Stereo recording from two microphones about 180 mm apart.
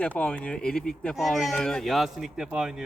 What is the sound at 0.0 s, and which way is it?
Speech, 5° left (ahead or behind).